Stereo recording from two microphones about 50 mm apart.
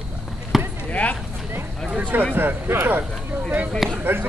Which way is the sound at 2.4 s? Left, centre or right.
Right.